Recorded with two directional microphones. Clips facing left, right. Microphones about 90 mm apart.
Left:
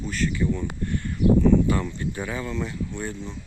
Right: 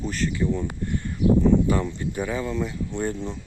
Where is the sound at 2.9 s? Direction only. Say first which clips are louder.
Right 5 dB; 30° right (ahead or behind).